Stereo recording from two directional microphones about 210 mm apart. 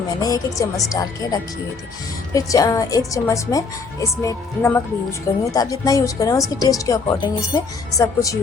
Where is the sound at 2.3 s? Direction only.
15° left (ahead or behind).